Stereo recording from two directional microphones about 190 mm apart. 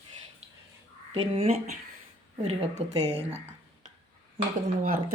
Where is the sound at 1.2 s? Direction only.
30° right (ahead or behind).